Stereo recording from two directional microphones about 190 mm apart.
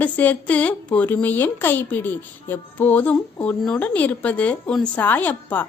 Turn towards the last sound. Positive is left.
turn(degrees=10)  # may be behind; listen again after turning